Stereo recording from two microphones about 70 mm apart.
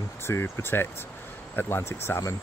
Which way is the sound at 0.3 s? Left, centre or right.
Left.